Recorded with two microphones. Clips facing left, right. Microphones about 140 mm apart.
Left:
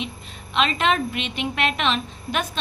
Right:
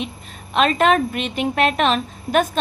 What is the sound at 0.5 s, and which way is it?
A woman's voice, 45° right (ahead or behind).